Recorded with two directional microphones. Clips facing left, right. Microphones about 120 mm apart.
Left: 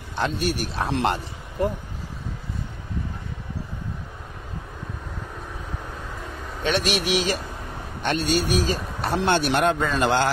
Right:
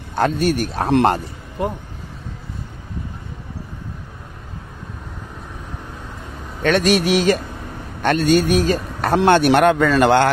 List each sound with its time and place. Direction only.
0.1 s speech: 50° right (ahead or behind)
6.6 s speech: 45° right (ahead or behind); by 10.3 s 60° right (ahead or behind)